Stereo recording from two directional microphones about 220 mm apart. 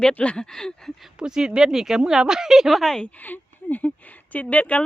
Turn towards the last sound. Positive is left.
turn(degrees=5)  # may be behind; listen again after turning